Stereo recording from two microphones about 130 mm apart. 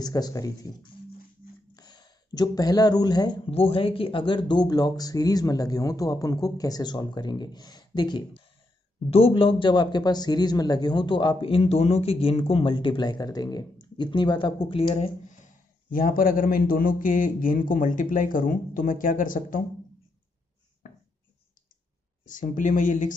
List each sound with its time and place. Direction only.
0.0 s speech: 30° left (ahead or behind)
1.7 s a sound: 30° left (ahead or behind)
3.4 s a man's voice: 45° left (ahead or behind)
15.2 s a man's voice: 85° left
22.2 s speech: 90° left